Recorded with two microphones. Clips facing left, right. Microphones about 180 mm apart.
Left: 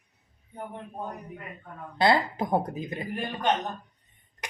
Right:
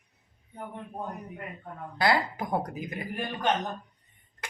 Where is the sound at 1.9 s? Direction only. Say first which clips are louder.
Left 3 dB; 25° left (ahead or behind).